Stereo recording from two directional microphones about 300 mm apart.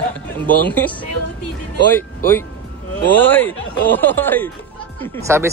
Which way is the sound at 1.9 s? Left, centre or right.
Centre.